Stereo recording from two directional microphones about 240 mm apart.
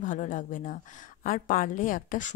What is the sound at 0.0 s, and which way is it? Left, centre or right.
Speech, left.